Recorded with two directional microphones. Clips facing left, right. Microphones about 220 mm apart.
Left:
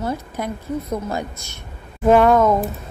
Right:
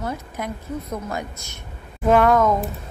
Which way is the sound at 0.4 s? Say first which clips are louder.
Left 2 dB; 35° left (ahead or behind).